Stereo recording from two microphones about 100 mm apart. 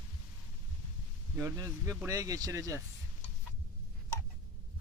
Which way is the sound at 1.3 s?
30° right (ahead or behind).